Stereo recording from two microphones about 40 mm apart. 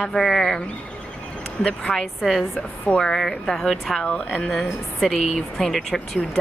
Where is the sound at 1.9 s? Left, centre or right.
Centre.